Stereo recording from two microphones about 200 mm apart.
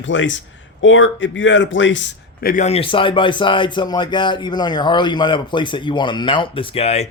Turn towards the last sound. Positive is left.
turn(degrees=30)  # may be behind; listen again after turning